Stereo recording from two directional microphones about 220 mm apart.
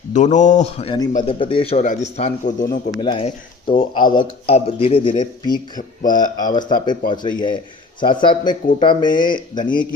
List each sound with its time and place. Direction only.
0.1 s a man's voice: 35° left (ahead or behind)
3.0 s speech: 25° left (ahead or behind)
9.6 s a man's voice: 40° left (ahead or behind)